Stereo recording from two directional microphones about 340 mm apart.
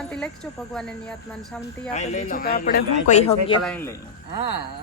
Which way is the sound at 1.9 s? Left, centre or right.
Centre.